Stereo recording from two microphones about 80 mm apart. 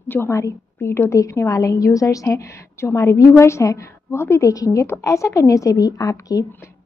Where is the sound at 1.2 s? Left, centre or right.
Left.